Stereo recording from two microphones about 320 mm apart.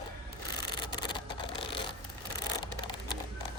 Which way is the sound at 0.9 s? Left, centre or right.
Centre.